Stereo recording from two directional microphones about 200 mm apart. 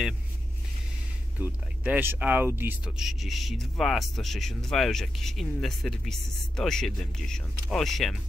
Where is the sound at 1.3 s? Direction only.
5° right (ahead or behind).